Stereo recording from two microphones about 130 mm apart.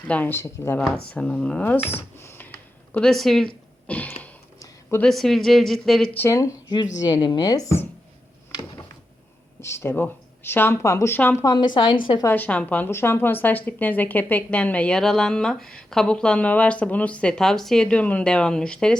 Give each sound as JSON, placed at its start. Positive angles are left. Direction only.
{"t": 0.1, "sound": "a woman's voice", "side_deg": 15}
{"t": 1.1, "sound": "speech", "side_deg": 5}
{"t": 2.5, "sound": "a sound", "side_deg": 5}
{"t": 5.0, "sound": "speech", "side_deg": 5}
{"t": 6.1, "sound": "speech", "side_deg": 20}
{"t": 9.6, "sound": "speech", "side_deg": 20}
{"t": 11.5, "sound": "a woman's voice", "side_deg": 35}
{"t": 12.2, "sound": "a woman's voice", "side_deg": 15}